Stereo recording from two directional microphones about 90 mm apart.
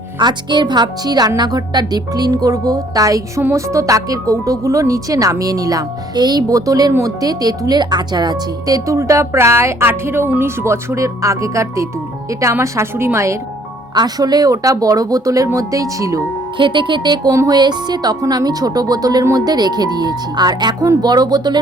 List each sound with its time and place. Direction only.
0.2 s speech: 55° right (ahead or behind); by 13.4 s 30° right (ahead or behind)
13.9 s speech: 50° right (ahead or behind)
16.6 s speech: 65° right (ahead or behind)
17.3 s speech: 35° right (ahead or behind)
17.6 s speech: 55° right (ahead or behind)